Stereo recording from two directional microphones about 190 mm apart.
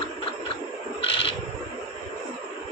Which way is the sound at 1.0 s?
30° left (ahead or behind).